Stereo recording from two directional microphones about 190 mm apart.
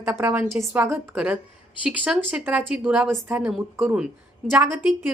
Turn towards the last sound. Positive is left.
turn(degrees=-5)  # may be behind; listen again after turning